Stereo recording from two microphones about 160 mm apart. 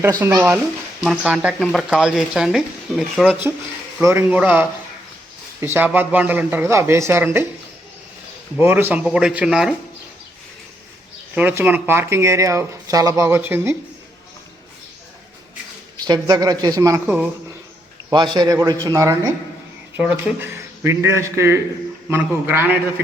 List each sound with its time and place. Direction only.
0.0 s speech: 15° right (ahead or behind)
4.0 s speech: 15° right (ahead or behind)
8.5 s speech: 10° right (ahead or behind)
11.3 s speech: 10° right (ahead or behind)
16.0 s speech: 25° right (ahead or behind)
18.3 s speech: 20° right (ahead or behind)